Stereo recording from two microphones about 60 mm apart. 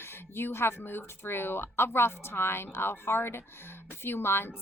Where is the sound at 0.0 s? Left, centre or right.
Left.